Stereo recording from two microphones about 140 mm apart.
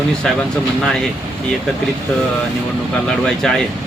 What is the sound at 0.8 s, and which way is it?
Speech, 5° left (ahead or behind).